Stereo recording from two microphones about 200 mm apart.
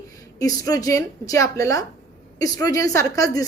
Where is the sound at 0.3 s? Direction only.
15° left (ahead or behind).